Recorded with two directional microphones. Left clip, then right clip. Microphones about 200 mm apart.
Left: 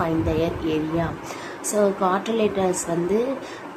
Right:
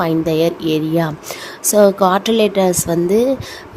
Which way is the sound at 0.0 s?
45° right (ahead or behind).